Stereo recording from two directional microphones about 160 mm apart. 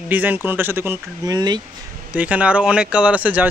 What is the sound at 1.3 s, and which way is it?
Speech, 25° right (ahead or behind).